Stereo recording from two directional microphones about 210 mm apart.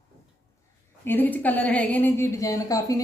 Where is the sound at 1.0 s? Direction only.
10° left (ahead or behind).